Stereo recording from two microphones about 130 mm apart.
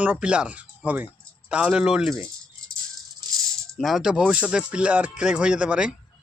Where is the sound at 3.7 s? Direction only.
Centre (ahead or behind).